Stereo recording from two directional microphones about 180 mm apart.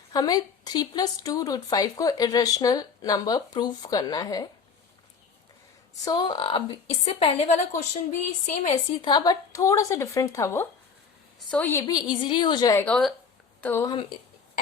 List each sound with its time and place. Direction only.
0.1 s a woman's voice: 20° left (ahead or behind)
6.1 s a woman's voice: 25° left (ahead or behind)
9.0 s a woman's voice: 25° left (ahead or behind)
12.8 s a woman's voice: centre (ahead or behind)
13.8 s a woman's voice: 25° left (ahead or behind)